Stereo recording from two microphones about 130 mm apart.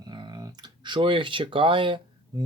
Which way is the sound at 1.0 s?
40° right (ahead or behind).